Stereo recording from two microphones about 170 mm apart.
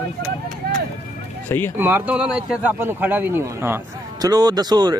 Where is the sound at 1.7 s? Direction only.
10° right (ahead or behind).